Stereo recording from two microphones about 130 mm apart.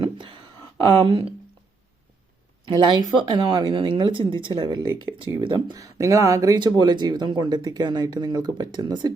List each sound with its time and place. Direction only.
0.9 s speech: 45° right (ahead or behind)
2.6 s speech: 30° right (ahead or behind)
5.7 s speech: 25° right (ahead or behind)